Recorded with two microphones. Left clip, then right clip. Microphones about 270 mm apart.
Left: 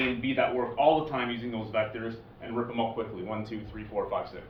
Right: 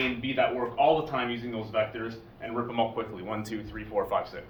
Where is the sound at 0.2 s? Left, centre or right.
Centre.